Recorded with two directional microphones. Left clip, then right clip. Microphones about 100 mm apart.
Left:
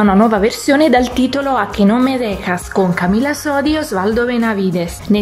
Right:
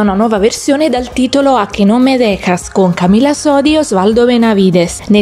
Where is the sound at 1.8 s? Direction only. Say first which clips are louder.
Right 4 dB; 30° right (ahead or behind).